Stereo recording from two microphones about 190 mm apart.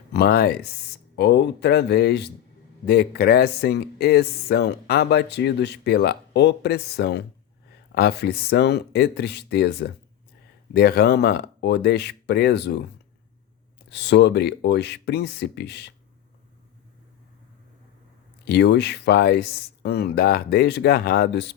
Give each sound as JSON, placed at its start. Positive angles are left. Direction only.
{"t": 0.1, "sound": "speech", "side_deg": 55}
{"t": 13.9, "sound": "speech", "side_deg": 65}
{"t": 18.4, "sound": "speech", "side_deg": 65}